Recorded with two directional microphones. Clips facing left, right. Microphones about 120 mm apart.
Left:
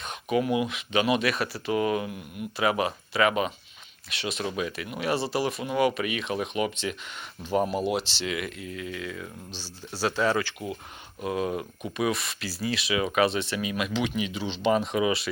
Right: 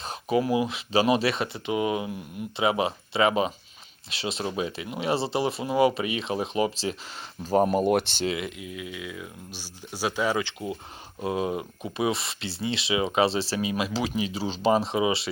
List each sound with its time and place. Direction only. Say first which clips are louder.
0.0 s speech: right 1 dB; 30° right (ahead or behind); by 8.2 s 50° right (ahead or behind)
8.2 s speech: right 3 dB; 30° right (ahead or behind)
8.4 s speech: left 1 dB; 10° right (ahead or behind)
10.4 s speech: right 1 dB; 25° right (ahead or behind)